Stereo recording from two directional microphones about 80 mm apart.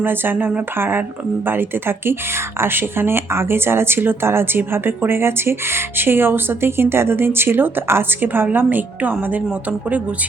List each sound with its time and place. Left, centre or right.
0.0 s speech: right